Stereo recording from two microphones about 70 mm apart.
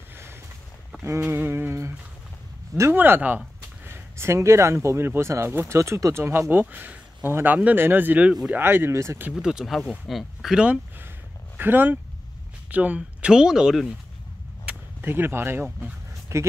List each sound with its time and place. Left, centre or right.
1.2 s a sound: right
2.9 s speech: right
3.8 s speech: right
6.1 s speech: right
9.3 s speech: centre
11.5 s speech: right
13.3 s speech: centre
15.0 s speech: right
16.3 s speech: right